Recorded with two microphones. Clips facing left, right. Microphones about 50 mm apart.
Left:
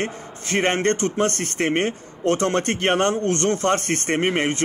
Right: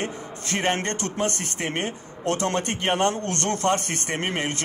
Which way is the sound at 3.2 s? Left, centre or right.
Left.